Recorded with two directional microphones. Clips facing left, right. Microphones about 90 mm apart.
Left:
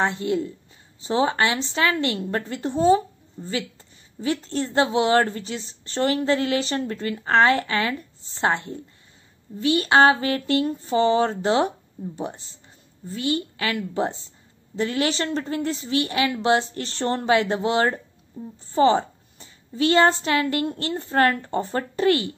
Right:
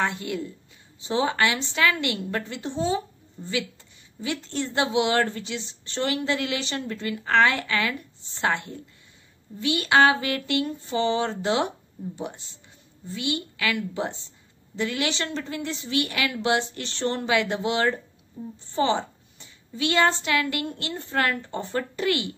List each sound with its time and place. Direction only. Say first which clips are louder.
0.0 s a woman's voice: left 4 dB; 30° left (ahead or behind)
4.2 s a woman's voice: left 4 dB; 40° left (ahead or behind)